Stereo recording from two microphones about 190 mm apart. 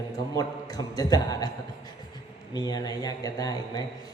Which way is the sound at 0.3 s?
20° left (ahead or behind).